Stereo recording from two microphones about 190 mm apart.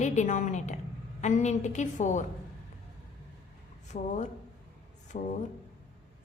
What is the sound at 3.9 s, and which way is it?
Speech, 40° left (ahead or behind).